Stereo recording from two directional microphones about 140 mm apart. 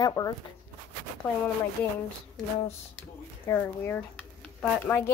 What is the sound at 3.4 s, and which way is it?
A woman's voice, 15° left (ahead or behind).